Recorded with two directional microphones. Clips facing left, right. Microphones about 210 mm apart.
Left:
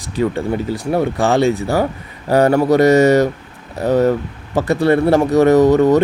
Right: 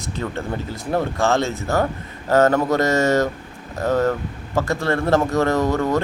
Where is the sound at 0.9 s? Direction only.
15° left (ahead or behind).